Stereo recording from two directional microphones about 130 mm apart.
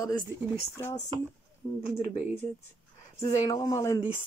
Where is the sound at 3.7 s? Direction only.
25° left (ahead or behind).